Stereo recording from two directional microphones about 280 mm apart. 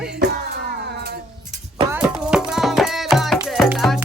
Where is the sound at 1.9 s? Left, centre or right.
Centre.